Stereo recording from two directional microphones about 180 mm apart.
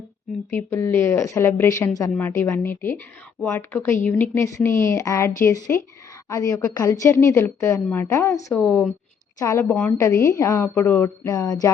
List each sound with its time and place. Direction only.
0.5 s a woman's voice: 15° left (ahead or behind)
9.6 s a woman's voice: 5° left (ahead or behind)
10.2 s a woman's voice: 15° left (ahead or behind)